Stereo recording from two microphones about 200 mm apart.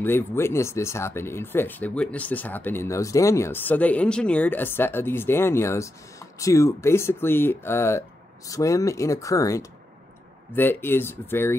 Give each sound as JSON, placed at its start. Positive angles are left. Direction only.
{"t": 0.0, "sound": "speech", "side_deg": 10}